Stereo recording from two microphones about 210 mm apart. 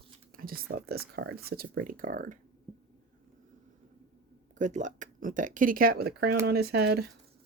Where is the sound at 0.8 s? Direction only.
45° right (ahead or behind).